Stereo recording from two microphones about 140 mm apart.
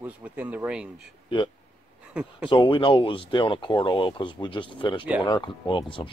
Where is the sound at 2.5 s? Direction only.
35° left (ahead or behind).